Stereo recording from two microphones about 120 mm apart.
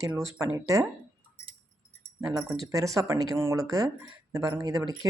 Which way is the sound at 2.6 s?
30° right (ahead or behind).